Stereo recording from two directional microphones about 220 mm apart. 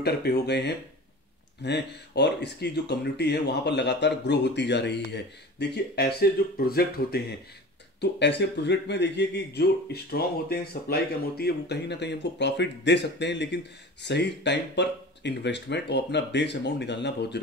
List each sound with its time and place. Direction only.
0.0 s speech: 45° left (ahead or behind)